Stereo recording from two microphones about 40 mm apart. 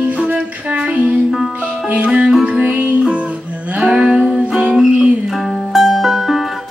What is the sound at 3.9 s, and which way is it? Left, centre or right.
Music, centre.